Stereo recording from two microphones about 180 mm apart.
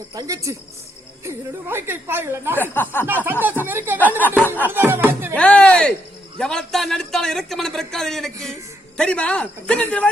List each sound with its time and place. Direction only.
0.1 s speech: 20° right (ahead or behind)
2.6 s speech: 10° left (ahead or behind)
3.1 s speech: 10° right (ahead or behind)
4.4 s speech: 10° left (ahead or behind)
4.6 s speech: 10° right (ahead or behind)
5.3 s a man's voice: 5° left (ahead or behind)